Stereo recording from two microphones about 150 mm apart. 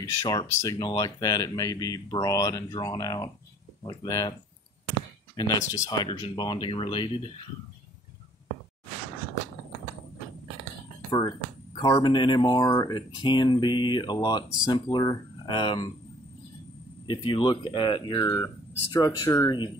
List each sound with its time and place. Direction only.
0.2 s speech: 25° left (ahead or behind)
5.3 s speech: 30° left (ahead or behind)
11.1 s speech: 25° left (ahead or behind)
17.1 s speech: 30° left (ahead or behind)